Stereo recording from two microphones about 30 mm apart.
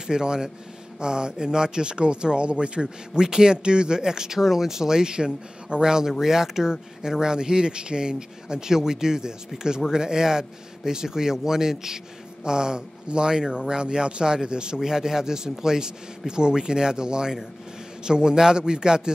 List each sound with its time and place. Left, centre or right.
0.0 s a man's voice: right
3.2 s speech: right
14.8 s a man's voice: centre